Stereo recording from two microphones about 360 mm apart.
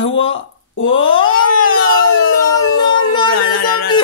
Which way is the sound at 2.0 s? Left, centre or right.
Left.